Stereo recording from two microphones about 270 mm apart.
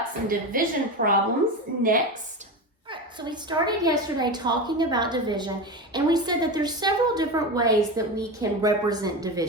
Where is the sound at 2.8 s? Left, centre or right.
Centre.